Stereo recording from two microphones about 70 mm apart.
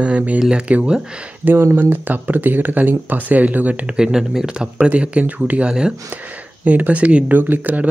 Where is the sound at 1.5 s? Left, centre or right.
Right.